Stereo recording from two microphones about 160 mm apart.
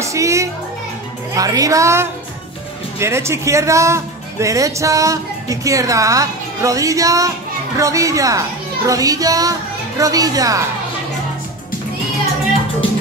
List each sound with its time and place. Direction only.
0.0 s speech: 20° right (ahead or behind)